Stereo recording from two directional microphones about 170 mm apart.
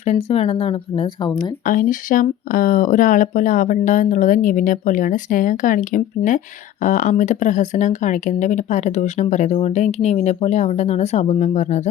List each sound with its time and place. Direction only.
0.0 s a woman's voice: 40° left (ahead or behind)
1.6 s speech: 50° left (ahead or behind)